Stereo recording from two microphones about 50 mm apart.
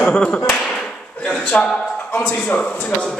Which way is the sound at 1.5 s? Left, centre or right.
Left.